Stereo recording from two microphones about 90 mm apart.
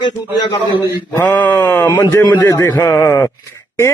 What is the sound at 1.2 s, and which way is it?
Speech, 15° left (ahead or behind).